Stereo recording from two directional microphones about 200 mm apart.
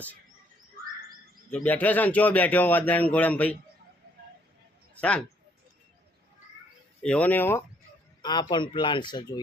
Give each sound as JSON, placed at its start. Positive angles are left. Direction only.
{"t": 1.5, "sound": "speech", "side_deg": 10}
{"t": 4.9, "sound": "speech", "side_deg": 5}
{"t": 7.0, "sound": "speech", "side_deg": 5}
{"t": 8.2, "sound": "speech", "side_deg": 20}